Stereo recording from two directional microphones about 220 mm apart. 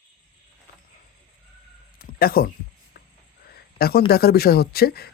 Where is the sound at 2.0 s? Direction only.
40° left (ahead or behind).